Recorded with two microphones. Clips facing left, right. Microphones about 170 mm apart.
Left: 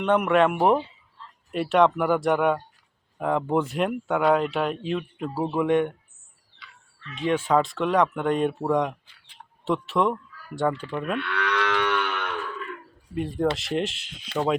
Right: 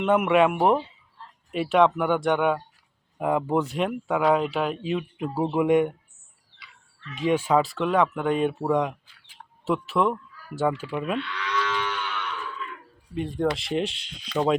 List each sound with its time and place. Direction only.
0.0 s speech: 5° right (ahead or behind)
5.3 s speech: 15° right (ahead or behind)
7.2 s speech: 10° right (ahead or behind)
11.2 s moo: 60° left (ahead or behind)
13.1 s speech: centre (ahead or behind)